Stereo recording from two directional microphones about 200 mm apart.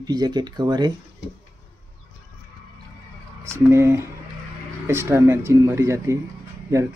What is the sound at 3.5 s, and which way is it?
Speech, 15° right (ahead or behind).